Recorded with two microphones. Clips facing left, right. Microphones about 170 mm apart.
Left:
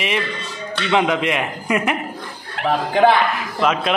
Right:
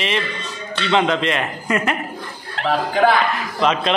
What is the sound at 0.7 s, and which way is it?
A man's voice, 10° left (ahead or behind).